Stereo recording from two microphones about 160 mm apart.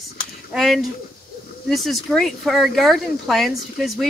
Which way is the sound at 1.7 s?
Centre (ahead or behind).